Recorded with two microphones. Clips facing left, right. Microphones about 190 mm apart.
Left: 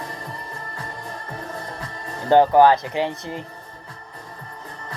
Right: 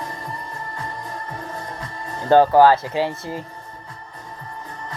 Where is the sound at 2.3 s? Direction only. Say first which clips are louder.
Right 1 dB; 20° left (ahead or behind).